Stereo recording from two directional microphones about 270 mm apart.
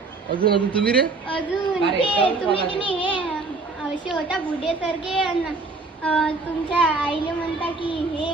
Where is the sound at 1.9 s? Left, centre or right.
Centre.